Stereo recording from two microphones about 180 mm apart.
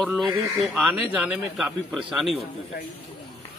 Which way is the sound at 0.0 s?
Centre (ahead or behind).